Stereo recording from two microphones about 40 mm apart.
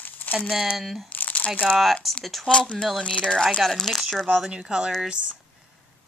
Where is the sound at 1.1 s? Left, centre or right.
Left.